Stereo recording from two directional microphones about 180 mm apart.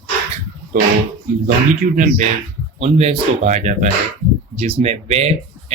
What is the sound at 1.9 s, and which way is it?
Speech, 45° right (ahead or behind).